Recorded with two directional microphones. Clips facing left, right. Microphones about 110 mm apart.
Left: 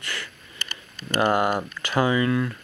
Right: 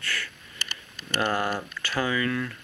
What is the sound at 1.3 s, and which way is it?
Speech, 15° left (ahead or behind).